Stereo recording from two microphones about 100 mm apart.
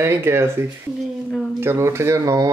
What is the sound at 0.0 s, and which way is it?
Speech, 25° right (ahead or behind).